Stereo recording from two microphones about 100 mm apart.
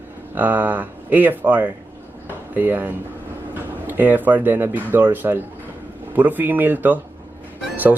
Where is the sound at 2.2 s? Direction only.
20° right (ahead or behind).